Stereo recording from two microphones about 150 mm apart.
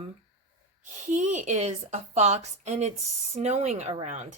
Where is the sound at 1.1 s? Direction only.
55° right (ahead or behind).